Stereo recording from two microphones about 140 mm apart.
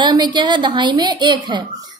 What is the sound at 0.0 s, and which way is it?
A woman's voice, 30° right (ahead or behind).